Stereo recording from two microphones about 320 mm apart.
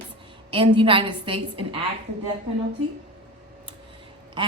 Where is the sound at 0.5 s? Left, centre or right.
Centre.